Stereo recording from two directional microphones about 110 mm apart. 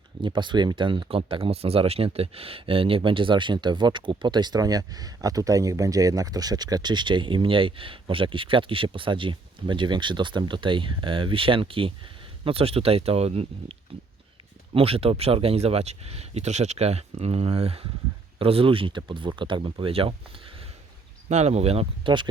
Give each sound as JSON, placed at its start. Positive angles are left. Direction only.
{"t": 0.2, "sound": "speech", "side_deg": -45}
{"t": 21.2, "sound": "speech", "side_deg": -85}